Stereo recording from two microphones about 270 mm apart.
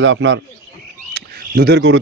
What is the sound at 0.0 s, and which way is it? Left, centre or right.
Speech, right.